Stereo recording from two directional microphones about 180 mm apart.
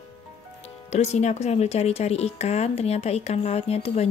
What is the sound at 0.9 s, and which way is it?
Speech, 40° left (ahead or behind).